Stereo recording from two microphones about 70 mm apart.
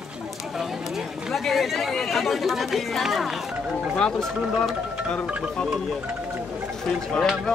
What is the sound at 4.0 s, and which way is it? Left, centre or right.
Speech, centre.